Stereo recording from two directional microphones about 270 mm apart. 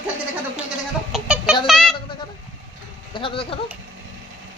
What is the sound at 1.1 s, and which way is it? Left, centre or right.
Chicken, centre.